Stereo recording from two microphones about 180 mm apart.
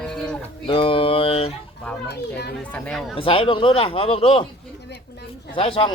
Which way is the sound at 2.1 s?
65° left (ahead or behind).